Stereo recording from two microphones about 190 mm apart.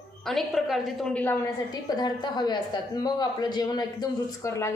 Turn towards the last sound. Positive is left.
turn(degrees=15)  # may be behind; listen again after turning